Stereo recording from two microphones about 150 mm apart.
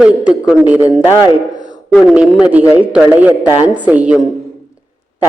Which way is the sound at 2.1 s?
5° right (ahead or behind).